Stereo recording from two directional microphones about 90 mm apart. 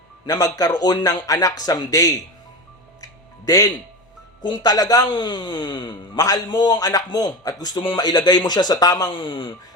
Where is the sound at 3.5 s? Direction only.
40° left (ahead or behind).